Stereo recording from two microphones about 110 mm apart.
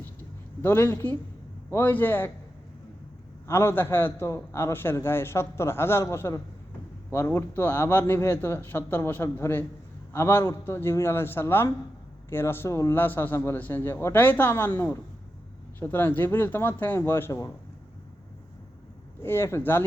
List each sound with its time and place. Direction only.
0.6 s a man's voice: 20° left (ahead or behind)
3.4 s a man's voice: 20° left (ahead or behind)
19.2 s a man's voice: 20° left (ahead or behind)